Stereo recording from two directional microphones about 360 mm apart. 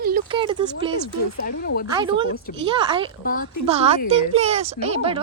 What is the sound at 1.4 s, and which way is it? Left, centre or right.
Speech, left.